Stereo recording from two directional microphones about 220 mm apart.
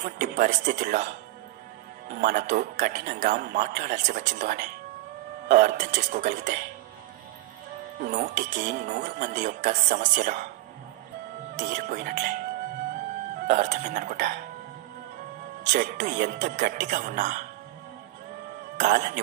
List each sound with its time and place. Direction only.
0.0 s a man's voice: 40° right (ahead or behind)
8.0 s a man's voice: 35° right (ahead or behind)
11.5 s a man's voice: 35° right (ahead or behind)
13.5 s a man's voice: 35° right (ahead or behind)
15.7 s a man's voice: 35° right (ahead or behind)
18.8 s a man's voice: 35° right (ahead or behind)